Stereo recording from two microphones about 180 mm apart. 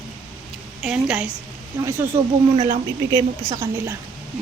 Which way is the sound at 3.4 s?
15° right (ahead or behind).